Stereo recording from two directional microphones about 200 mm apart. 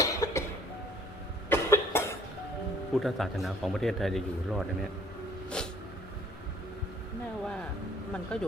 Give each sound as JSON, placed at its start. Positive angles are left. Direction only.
{"t": 0.0, "sound": "cough", "side_deg": 15}
{"t": 1.5, "sound": "cough", "side_deg": 10}
{"t": 2.9, "sound": "a man's voice", "side_deg": 0}
{"t": 8.3, "sound": "a man's voice", "side_deg": 5}